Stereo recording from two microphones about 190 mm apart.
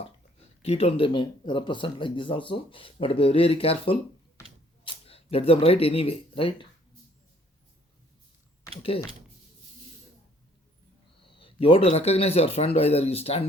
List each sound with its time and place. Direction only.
0.0 s speech: 35° left (ahead or behind)
11.3 s a man's voice: 30° left (ahead or behind)